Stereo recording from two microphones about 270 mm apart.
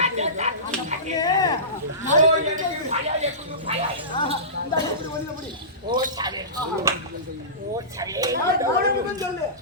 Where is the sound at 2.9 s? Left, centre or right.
Right.